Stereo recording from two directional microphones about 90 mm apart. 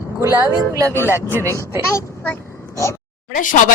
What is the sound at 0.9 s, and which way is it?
Speech, 30° left (ahead or behind).